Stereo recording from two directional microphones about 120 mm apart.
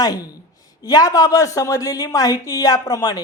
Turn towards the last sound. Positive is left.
turn(degrees=30)  # may be behind; listen again after turning